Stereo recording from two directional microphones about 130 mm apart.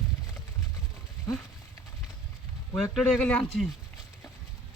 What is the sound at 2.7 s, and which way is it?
Speech, 5° left (ahead or behind).